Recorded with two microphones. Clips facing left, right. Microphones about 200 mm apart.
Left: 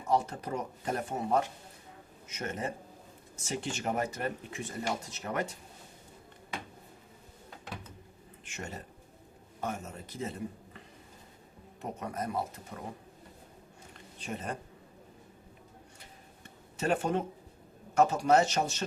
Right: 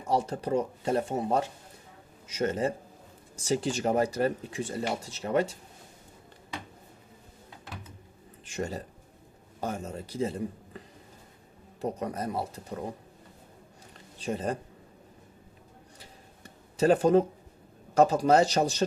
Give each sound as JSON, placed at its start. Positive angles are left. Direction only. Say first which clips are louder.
{"t": 0.1, "sound": "speech", "louder": "right 3 dB", "side_deg": -35}
{"t": 8.4, "sound": "speech", "louder": "right 8 dB", "side_deg": -35}
{"t": 11.8, "sound": "speech", "louder": "right 5 dB", "side_deg": -35}
{"t": 14.2, "sound": "speech", "louder": "right 7 dB", "side_deg": -35}
{"t": 16.0, "sound": "a sound", "louder": "right 2 dB", "side_deg": -35}
{"t": 17.9, "sound": "speech", "louder": "right 3 dB", "side_deg": -35}